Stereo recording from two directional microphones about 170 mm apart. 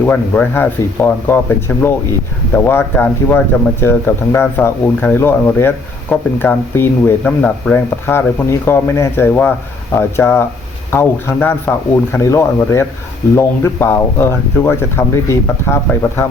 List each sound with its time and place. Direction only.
0.0 s speech: 10° left (ahead or behind)